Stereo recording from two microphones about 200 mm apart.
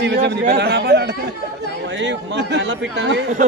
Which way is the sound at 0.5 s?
55° right (ahead or behind).